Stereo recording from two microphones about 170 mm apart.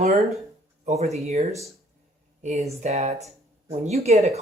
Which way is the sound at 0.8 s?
40° right (ahead or behind).